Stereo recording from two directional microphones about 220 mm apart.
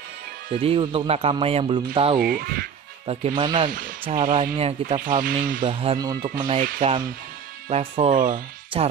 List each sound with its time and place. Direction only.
0.6 s speech: 25° right (ahead or behind)
2.1 s speech: 45° right (ahead or behind)
3.1 s speech: 25° right (ahead or behind)
5.6 s speech: 25° right (ahead or behind)
8.1 s speech: 35° right (ahead or behind)
8.7 s speech: 20° right (ahead or behind)